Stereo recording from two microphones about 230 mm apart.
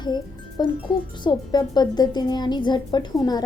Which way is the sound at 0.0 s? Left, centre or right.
Centre.